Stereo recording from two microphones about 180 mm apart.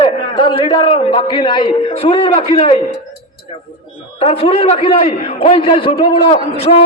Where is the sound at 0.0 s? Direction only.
30° left (ahead or behind).